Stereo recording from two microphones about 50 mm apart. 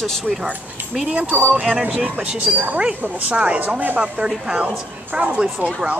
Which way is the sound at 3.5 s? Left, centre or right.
Right.